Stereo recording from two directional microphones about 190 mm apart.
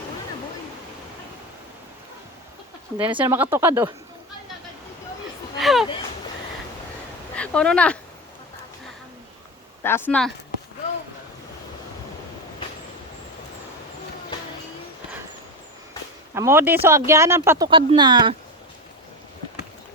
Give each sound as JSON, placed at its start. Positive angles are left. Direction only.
{"t": 3.2, "sound": "speech", "side_deg": -10}
{"t": 5.5, "sound": "a sound", "side_deg": 0}
{"t": 7.3, "sound": "speech", "side_deg": 5}
{"t": 9.8, "sound": "speech", "side_deg": 10}
{"t": 16.3, "sound": "speech", "side_deg": -15}
{"t": 17.7, "sound": "speech", "side_deg": -25}